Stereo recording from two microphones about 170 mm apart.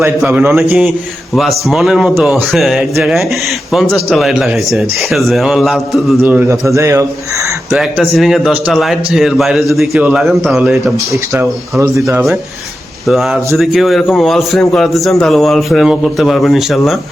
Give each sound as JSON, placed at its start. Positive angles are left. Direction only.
{"t": 0.0, "sound": "a man's voice", "side_deg": -10}
{"t": 7.7, "sound": "a man's voice", "side_deg": -5}
{"t": 11.3, "sound": "speech", "side_deg": -15}
{"t": 13.1, "sound": "a man's voice", "side_deg": 0}